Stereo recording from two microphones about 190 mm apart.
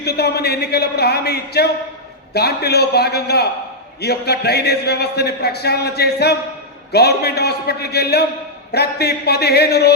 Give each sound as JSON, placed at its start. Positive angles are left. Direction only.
{"t": 0.0, "sound": "a man's voice", "side_deg": 60}